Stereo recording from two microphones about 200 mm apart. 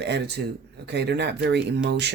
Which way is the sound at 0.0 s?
55° right (ahead or behind).